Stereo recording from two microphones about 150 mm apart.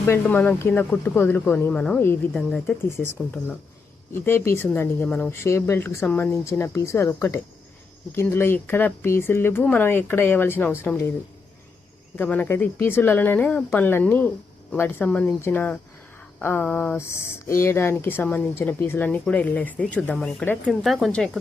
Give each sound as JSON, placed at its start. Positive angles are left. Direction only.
{"t": 0.0, "sound": "speech", "side_deg": 15}
{"t": 12.1, "sound": "speech", "side_deg": 10}